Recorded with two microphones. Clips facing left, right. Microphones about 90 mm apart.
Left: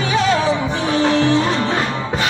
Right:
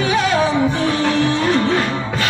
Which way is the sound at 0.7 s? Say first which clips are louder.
Left 1 dB; 20° left (ahead or behind).